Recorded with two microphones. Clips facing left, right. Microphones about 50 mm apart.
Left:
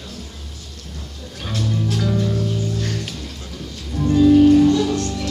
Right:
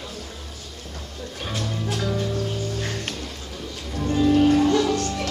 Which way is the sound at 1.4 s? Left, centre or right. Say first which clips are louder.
Left 5 dB; centre.